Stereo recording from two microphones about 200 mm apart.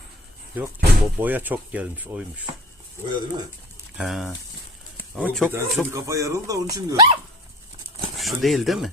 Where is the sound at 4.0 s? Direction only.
Centre (ahead or behind).